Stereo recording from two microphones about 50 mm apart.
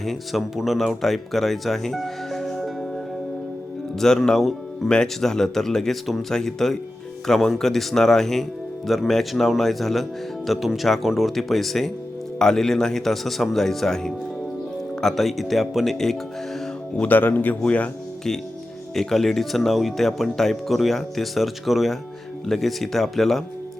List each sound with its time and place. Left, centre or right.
0.0 s speech: centre
3.9 s speech: centre
17.1 s speech: left
18.9 s speech: centre